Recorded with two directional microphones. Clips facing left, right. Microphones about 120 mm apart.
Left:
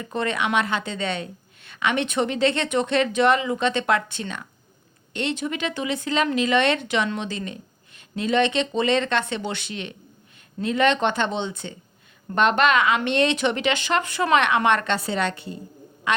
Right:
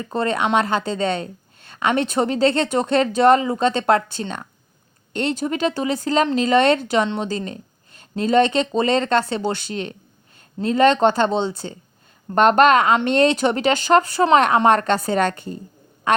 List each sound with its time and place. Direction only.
0.0 s a woman's voice: 35° right (ahead or behind)